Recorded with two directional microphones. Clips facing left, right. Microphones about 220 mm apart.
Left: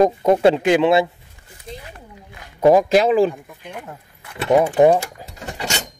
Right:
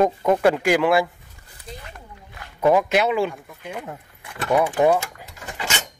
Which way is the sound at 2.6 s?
35° left (ahead or behind).